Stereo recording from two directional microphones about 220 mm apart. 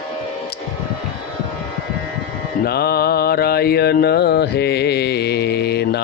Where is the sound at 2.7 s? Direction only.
45° left (ahead or behind).